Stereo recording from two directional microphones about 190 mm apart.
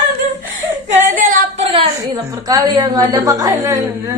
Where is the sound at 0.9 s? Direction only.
45° right (ahead or behind).